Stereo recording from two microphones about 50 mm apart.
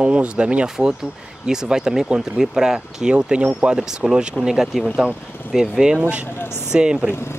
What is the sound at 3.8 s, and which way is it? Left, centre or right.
Speech, centre.